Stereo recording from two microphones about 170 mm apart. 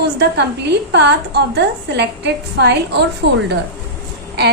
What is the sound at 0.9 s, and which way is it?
A woman's voice, 80° right.